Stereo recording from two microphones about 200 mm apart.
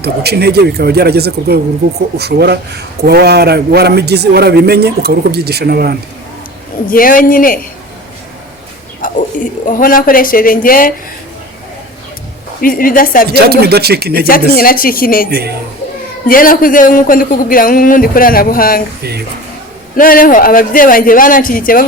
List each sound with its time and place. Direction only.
0.0 s a man's voice: 55° right (ahead or behind)
6.9 s speech: 45° left (ahead or behind)
9.0 s a sound: 45° left (ahead or behind)
9.6 s speech: 45° left (ahead or behind)
12.6 s speech: 45° left (ahead or behind)
13.2 s a man's voice: 50° right (ahead or behind)
14.3 s speech: 45° left (ahead or behind)
15.3 s a man's voice: 55° right (ahead or behind)
16.2 s speech: 45° left (ahead or behind)
20.0 s speech: 45° left (ahead or behind)